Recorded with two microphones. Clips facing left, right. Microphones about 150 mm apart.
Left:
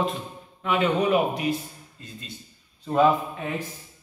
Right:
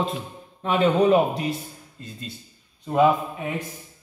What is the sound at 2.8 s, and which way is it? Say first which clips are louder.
Speech: right 1 dB; 15° right (ahead or behind).